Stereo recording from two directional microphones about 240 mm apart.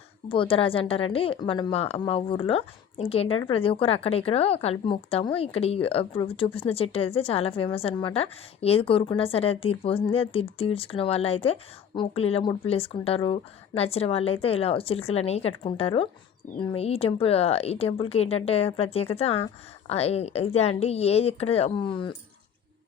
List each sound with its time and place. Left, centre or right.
0.3 s speech: left